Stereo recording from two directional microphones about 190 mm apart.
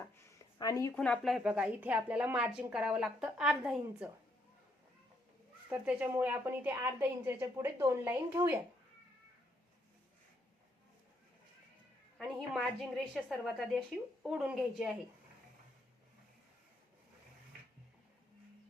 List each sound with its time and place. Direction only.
0.3 s a sound: 20° left (ahead or behind)
0.9 s a woman's voice: 5° left (ahead or behind)
5.6 s a woman's voice: 10° right (ahead or behind)
12.1 s a woman's voice: centre (ahead or behind)